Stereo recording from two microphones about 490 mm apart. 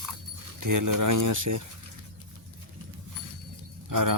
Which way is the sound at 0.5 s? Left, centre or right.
Right.